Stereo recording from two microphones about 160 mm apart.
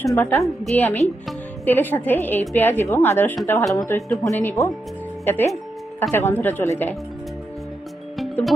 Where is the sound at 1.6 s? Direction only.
10° left (ahead or behind).